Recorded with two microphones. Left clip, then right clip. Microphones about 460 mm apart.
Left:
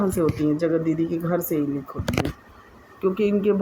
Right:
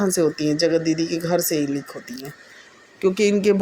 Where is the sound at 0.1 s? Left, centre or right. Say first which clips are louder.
Right 2 dB; left.